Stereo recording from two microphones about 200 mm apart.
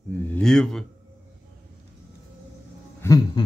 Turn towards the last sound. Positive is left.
turn(degrees=20)  # may be behind; listen again after turning